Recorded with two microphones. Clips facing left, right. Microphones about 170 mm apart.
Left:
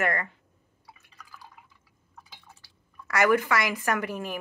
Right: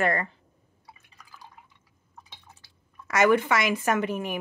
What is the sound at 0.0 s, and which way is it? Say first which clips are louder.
Speech: right 3 dB; 30° right (ahead or behind).